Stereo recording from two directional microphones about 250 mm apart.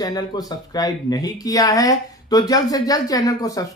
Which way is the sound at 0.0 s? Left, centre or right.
Centre.